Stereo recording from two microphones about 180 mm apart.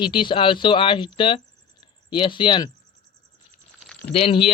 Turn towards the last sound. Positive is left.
turn(degrees=30)  # may be behind; listen again after turning